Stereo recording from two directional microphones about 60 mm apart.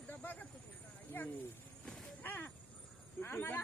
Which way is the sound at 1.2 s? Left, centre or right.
Left.